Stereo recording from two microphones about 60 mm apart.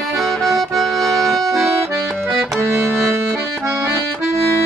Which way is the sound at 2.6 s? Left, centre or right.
Right.